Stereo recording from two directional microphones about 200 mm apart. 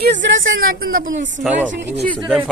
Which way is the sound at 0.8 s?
45° right (ahead or behind).